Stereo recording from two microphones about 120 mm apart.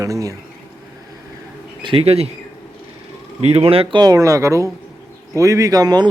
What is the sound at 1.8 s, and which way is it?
Speech, 50° right (ahead or behind).